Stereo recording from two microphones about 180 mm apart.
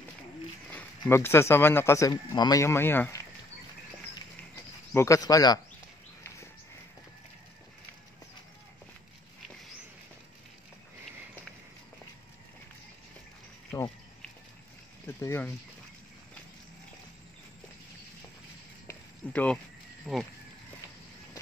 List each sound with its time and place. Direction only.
0.7 s speech: 10° left (ahead or behind)
4.9 s speech: 15° left (ahead or behind)
13.7 s a sound: 15° left (ahead or behind)
15.0 s speech: 15° left (ahead or behind)
18.9 s a sound: 5° left (ahead or behind)
20.1 s speech: 5° right (ahead or behind)